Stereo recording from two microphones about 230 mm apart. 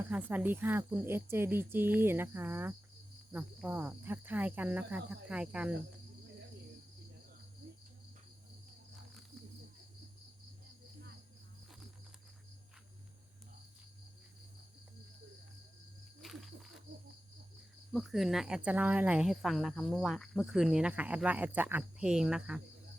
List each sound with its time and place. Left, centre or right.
0.1 s speech: centre
16.2 s cricket: centre
17.9 s speech: centre